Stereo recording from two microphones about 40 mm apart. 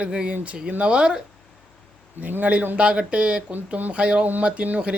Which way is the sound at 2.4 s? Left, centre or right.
Right.